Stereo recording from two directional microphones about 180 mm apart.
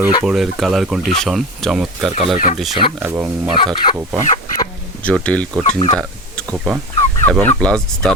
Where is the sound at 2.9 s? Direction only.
10° right (ahead or behind).